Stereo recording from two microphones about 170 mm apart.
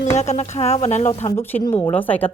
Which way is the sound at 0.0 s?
40° left (ahead or behind).